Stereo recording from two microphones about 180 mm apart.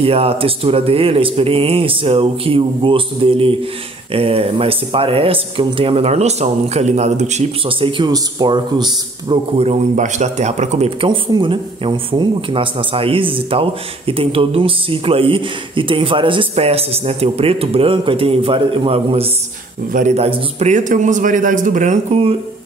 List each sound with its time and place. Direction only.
0.0 s a man's voice: 30° right (ahead or behind)